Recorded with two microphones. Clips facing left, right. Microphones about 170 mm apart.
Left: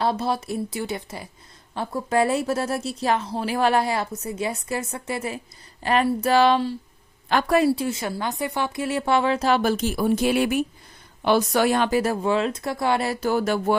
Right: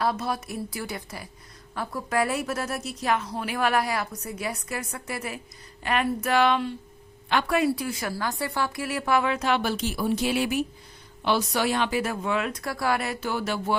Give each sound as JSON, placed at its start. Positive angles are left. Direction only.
{"t": 0.0, "sound": "a woman's voice", "side_deg": 30}